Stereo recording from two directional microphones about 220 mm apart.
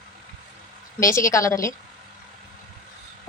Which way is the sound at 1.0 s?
15° left (ahead or behind).